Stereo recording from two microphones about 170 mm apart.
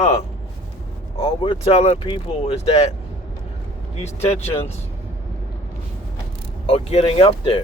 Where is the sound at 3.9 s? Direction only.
40° left (ahead or behind).